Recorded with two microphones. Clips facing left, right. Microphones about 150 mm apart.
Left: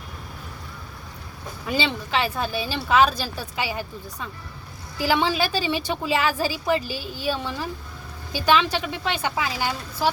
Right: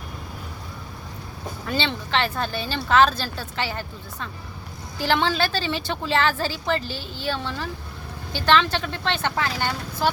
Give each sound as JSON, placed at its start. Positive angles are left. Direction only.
{"t": 1.6, "sound": "a woman's voice", "side_deg": 10}